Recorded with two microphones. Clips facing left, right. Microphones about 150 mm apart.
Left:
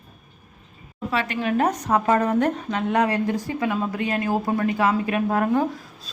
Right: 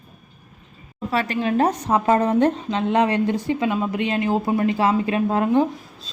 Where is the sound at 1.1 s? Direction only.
35° right (ahead or behind).